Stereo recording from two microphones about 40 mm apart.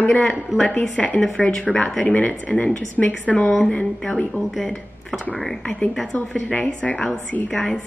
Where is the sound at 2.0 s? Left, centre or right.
Left.